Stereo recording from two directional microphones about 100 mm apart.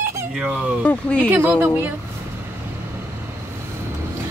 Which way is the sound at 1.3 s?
20° right (ahead or behind).